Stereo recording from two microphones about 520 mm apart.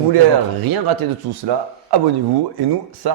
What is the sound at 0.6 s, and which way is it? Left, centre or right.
Speech, right.